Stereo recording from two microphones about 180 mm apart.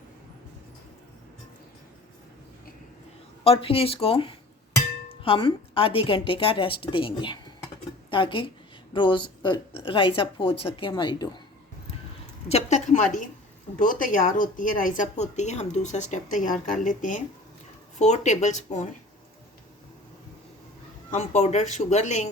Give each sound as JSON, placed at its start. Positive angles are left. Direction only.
{"t": 3.4, "sound": "a woman's voice", "side_deg": 30}
{"t": 12.5, "sound": "speech", "side_deg": 35}
{"t": 21.1, "sound": "speech", "side_deg": 40}